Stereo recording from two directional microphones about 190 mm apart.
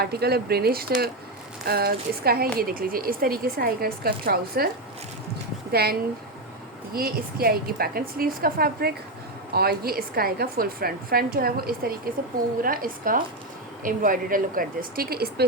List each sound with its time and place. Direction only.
0.0 s a woman's voice: 55° right (ahead or behind)
5.7 s a woman's voice: 55° right (ahead or behind)